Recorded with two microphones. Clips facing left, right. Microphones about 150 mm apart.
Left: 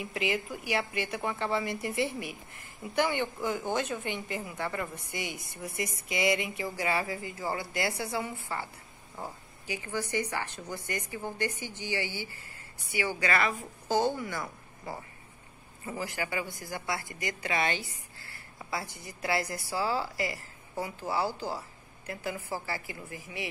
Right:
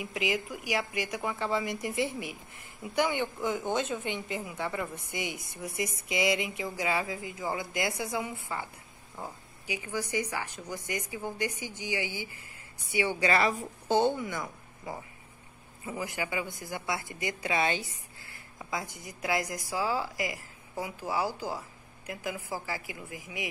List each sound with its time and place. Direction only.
0.0 s a woman's voice: 15° right (ahead or behind)
9.7 s a woman's voice: 15° right (ahead or behind)
15.8 s a woman's voice: 15° right (ahead or behind)